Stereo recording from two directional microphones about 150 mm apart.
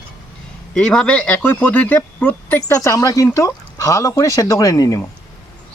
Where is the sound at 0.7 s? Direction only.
5° left (ahead or behind); by 5.0 s 20° left (ahead or behind).